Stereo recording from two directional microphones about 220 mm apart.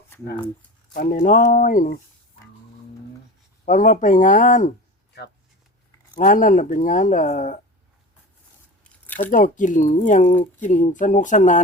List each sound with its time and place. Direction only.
0.9 s speech: 40° left (ahead or behind)
3.7 s speech: 35° left (ahead or behind)
6.1 s speech: 35° left (ahead or behind)
9.3 s speech: 35° left (ahead or behind)